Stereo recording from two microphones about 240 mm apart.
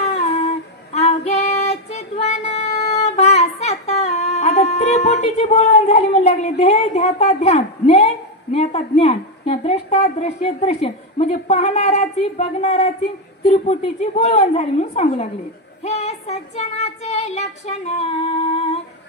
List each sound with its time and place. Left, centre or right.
0.0 s female singing: left
8.5 s a woman's voice: left